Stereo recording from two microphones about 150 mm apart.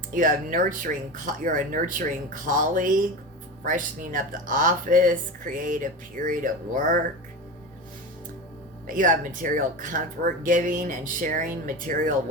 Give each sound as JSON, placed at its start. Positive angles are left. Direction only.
{"t": 0.1, "sound": "speech", "side_deg": -65}
{"t": 8.9, "sound": "speech", "side_deg": -65}